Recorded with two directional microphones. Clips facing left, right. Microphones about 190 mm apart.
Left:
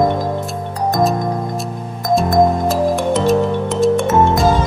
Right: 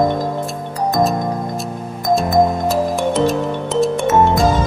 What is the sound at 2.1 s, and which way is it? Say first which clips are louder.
Music: left 2 dB; centre (ahead or behind).